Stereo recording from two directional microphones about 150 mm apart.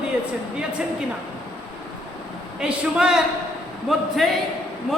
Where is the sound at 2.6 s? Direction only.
5° right (ahead or behind).